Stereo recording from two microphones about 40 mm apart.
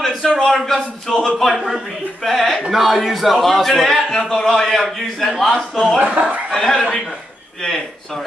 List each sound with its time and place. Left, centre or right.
0.4 s a man's voice: centre
5.9 s speech: right
6.5 s a man's voice: centre